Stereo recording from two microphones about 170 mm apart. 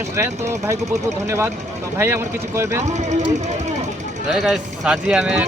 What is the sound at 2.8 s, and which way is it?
Speech, 45° right (ahead or behind).